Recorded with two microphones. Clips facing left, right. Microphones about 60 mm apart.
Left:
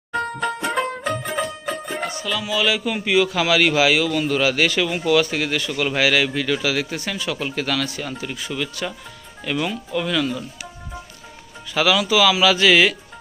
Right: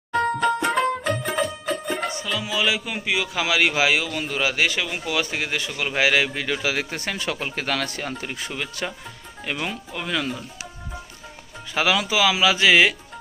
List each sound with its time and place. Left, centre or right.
0.3 s music: centre
2.0 s a man's voice: right
6.9 s a man's voice: right
11.7 s a man's voice: right